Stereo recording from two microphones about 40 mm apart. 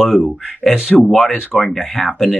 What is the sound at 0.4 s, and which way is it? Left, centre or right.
Speech, centre.